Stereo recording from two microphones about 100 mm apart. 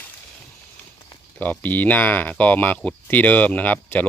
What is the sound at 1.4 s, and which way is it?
Speech, 15° left (ahead or behind).